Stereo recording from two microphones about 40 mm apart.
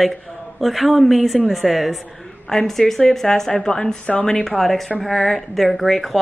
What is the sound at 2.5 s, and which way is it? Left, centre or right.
A woman's voice, centre.